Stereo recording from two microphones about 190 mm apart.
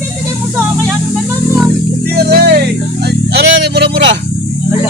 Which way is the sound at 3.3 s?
60° right (ahead or behind).